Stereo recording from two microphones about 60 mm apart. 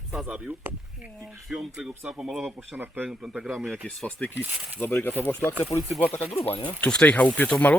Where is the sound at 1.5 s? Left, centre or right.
Centre.